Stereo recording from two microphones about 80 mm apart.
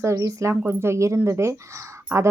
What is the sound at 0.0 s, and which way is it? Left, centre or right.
Speech, right.